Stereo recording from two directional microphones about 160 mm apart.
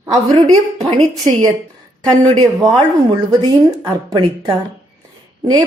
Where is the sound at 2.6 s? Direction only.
25° right (ahead or behind).